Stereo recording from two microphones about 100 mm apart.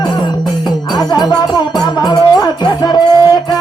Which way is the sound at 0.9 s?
45° left (ahead or behind).